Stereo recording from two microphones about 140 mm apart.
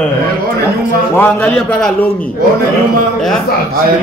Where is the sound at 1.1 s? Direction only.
15° left (ahead or behind).